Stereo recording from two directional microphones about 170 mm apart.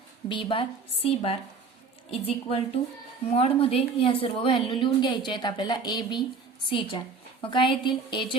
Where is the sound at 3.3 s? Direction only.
35° left (ahead or behind).